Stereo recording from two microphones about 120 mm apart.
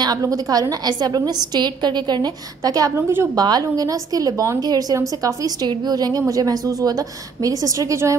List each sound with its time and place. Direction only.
0.0 s a woman's voice: 30° right (ahead or behind)